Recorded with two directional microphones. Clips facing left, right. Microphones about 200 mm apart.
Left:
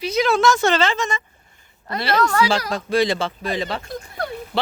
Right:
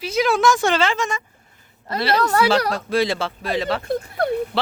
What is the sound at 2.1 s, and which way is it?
Speech, 40° right (ahead or behind).